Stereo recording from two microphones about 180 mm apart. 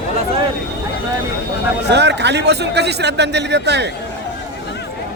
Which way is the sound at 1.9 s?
70° right (ahead or behind).